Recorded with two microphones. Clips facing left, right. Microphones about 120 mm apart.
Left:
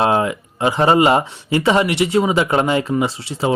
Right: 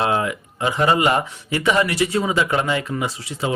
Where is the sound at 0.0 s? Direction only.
30° left (ahead or behind).